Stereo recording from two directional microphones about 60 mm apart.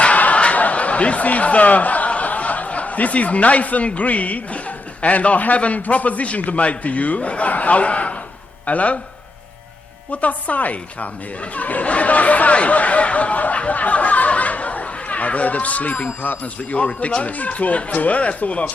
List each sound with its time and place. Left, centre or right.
0.0 s a sound: left
5.0 s a man's voice: left
10.1 s a man's voice: left